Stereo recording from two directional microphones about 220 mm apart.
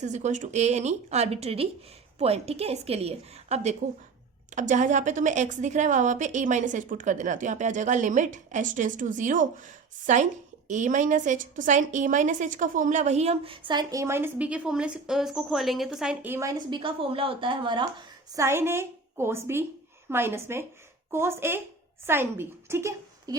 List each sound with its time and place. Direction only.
0.0 s a woman's voice: 30° right (ahead or behind); by 23.4 s 15° right (ahead or behind)